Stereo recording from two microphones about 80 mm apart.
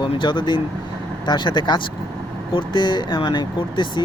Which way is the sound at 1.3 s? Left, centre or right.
Left.